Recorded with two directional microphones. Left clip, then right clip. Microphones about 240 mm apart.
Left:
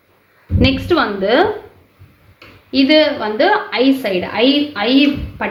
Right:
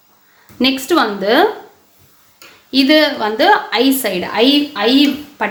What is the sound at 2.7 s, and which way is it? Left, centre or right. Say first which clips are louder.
A woman's voice: even; right.